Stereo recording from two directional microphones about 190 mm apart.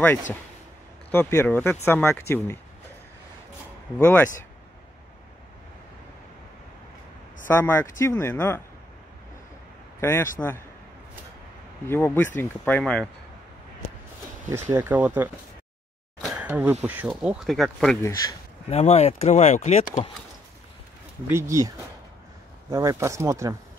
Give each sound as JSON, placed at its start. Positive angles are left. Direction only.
{"t": 0.0, "sound": "speech", "side_deg": 10}
{"t": 4.0, "sound": "speech", "side_deg": 10}
{"t": 7.4, "sound": "speech", "side_deg": 10}
{"t": 9.9, "sound": "a man's voice", "side_deg": 15}
{"t": 11.9, "sound": "speech", "side_deg": 10}
{"t": 14.5, "sound": "speech", "side_deg": -10}
{"t": 16.3, "sound": "a sound", "side_deg": -10}
{"t": 16.8, "sound": "speech", "side_deg": -10}
{"t": 18.0, "sound": "speech", "side_deg": 20}
{"t": 18.7, "sound": "speech", "side_deg": 35}
{"t": 21.3, "sound": "speech", "side_deg": -15}